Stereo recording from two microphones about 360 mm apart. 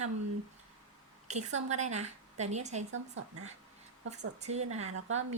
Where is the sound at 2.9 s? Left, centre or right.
Right.